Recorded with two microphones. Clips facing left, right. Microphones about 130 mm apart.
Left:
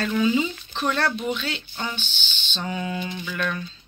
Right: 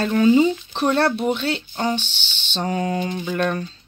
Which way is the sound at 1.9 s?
75° right (ahead or behind).